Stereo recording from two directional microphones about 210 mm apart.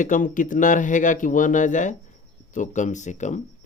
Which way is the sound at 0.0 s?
40° left (ahead or behind).